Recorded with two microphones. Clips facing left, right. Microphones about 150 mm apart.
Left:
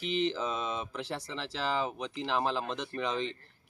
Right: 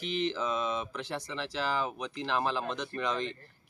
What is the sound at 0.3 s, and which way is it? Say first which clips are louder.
Mantra: right 2 dB; 35° left (ahead or behind).